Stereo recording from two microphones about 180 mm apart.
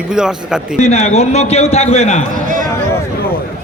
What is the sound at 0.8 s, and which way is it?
A man's voice, 35° left (ahead or behind).